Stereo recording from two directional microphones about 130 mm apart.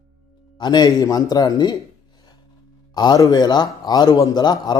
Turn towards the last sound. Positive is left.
turn(degrees=35)  # may be behind; listen again after turning